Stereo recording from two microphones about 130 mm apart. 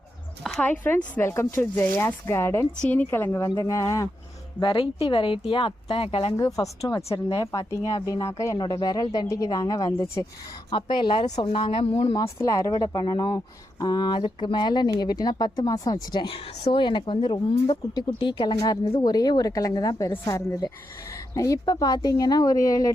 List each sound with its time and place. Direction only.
0.6 s a woman's voice: 15° left (ahead or behind)
4.6 s a woman's voice: 40° left (ahead or behind)
6.3 s a woman's voice: 30° left (ahead or behind); by 12.1 s 45° left (ahead or behind)
12.1 s a woman's voice: 25° left (ahead or behind)